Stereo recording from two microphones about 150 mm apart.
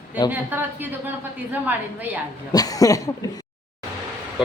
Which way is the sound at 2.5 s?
25° left (ahead or behind).